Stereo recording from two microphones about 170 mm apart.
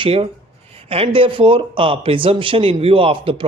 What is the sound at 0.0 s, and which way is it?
Speech, 35° right (ahead or behind).